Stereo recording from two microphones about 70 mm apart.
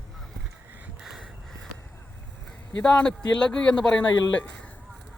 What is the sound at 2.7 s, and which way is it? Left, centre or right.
Speech, centre.